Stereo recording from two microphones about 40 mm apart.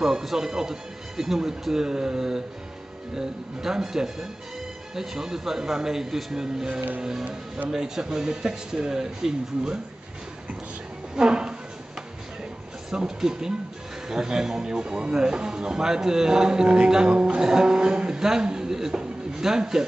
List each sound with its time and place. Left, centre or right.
0.0 s speech: centre
11.1 s speech: centre
12.9 s speech: centre